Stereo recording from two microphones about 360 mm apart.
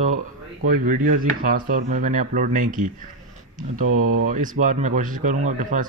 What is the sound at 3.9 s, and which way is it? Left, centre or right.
Speech, right.